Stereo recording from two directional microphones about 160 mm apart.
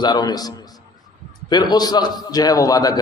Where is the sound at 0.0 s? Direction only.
25° left (ahead or behind).